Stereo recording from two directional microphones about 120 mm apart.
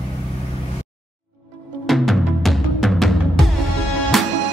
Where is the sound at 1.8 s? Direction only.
Centre (ahead or behind).